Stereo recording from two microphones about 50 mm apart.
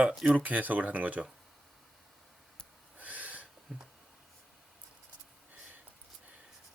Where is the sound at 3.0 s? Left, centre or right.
Right.